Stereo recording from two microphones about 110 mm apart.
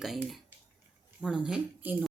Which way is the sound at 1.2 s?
5° right (ahead or behind).